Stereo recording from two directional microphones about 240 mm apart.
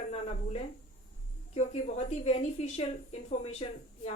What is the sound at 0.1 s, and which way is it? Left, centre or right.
A woman's voice, left.